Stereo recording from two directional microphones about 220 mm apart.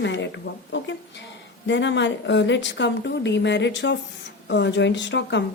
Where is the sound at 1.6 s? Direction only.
55° left (ahead or behind).